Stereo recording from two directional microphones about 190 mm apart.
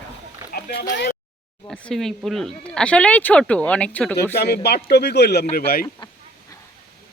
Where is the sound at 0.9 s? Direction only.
60° left (ahead or behind).